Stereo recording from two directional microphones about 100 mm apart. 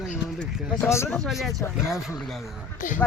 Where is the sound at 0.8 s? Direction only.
25° left (ahead or behind).